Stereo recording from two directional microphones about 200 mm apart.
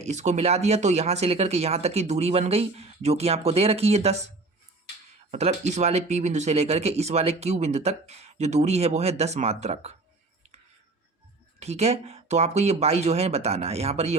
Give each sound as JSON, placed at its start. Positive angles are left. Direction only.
{"t": 0.0, "sound": "speech", "side_deg": -35}
{"t": 5.3, "sound": "speech", "side_deg": -35}
{"t": 11.6, "sound": "speech", "side_deg": -30}